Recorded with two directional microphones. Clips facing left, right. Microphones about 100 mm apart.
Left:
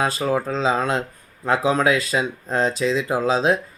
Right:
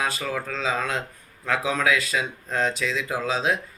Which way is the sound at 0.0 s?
30° left (ahead or behind).